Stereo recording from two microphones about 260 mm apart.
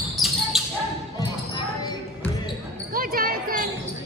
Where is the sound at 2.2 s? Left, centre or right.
Centre.